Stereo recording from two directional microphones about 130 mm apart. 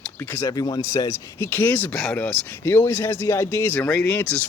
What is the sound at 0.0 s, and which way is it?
Speech, 15° left (ahead or behind).